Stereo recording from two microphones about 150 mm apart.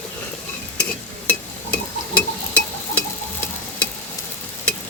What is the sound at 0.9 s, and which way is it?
Stir, 10° left (ahead or behind).